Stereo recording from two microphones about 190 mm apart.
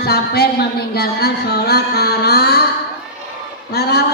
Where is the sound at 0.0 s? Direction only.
55° left (ahead or behind).